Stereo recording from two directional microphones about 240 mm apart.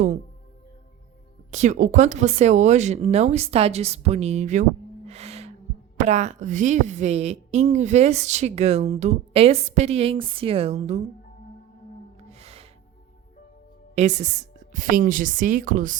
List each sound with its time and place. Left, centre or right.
1.5 s speech: right
5.0 s gasp: right
6.0 s speech: right
12.3 s music: right
13.9 s a woman's voice: right